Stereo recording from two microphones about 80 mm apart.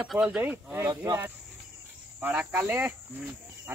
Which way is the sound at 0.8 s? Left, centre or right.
Right.